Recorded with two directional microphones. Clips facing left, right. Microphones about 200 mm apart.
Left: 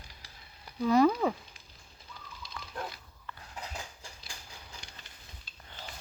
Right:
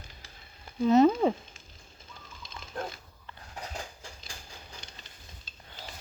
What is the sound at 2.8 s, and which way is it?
Pig, 45° right (ahead or behind).